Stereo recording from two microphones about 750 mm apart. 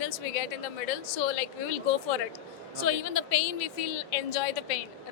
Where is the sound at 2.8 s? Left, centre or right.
Left.